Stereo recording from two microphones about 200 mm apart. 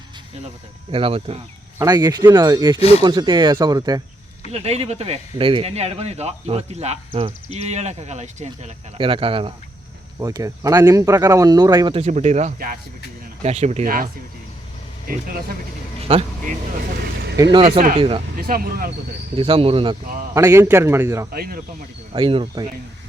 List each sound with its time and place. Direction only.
0.9 s speech: 25° right (ahead or behind)
4.5 s speech: 30° right (ahead or behind)
10.2 s speech: 15° right (ahead or behind); by 12.8 s 45° right (ahead or behind)
13.4 s speech: 35° right (ahead or behind)
16.0 s a sound: 30° right (ahead or behind)
17.3 s speech: 20° right (ahead or behind)
18.3 s speech: 45° right (ahead or behind)
19.4 s speech: 25° right (ahead or behind)
20.3 s a man's voice: 15° right (ahead or behind)
21.3 s speech: 45° right (ahead or behind)
22.1 s speech: 25° right (ahead or behind)